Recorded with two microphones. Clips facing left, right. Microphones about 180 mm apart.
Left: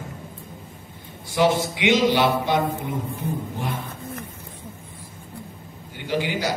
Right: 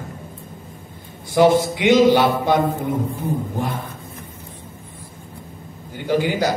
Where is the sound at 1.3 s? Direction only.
45° right (ahead or behind).